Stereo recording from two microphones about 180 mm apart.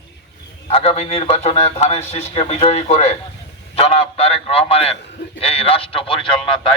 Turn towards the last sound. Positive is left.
turn(degrees=30)  # may be behind; listen again after turning